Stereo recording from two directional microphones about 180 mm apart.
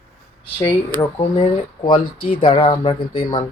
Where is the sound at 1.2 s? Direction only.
30° left (ahead or behind).